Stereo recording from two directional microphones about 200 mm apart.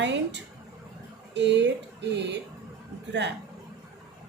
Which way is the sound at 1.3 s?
60° right (ahead or behind).